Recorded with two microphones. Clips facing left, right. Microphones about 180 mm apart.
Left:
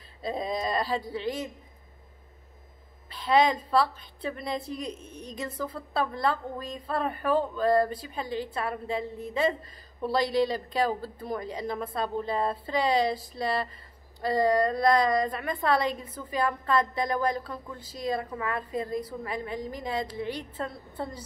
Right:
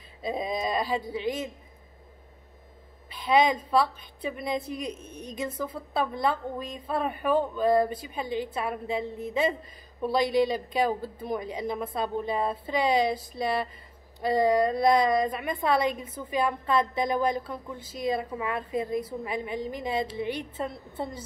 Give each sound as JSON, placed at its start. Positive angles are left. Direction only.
{"t": 0.2, "sound": "speech", "side_deg": -20}
{"t": 3.1, "sound": "a woman's voice", "side_deg": -15}